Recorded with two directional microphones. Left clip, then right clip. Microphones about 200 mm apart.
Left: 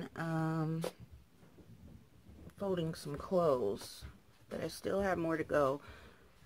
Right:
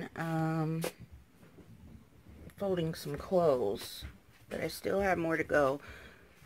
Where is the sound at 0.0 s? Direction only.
5° right (ahead or behind).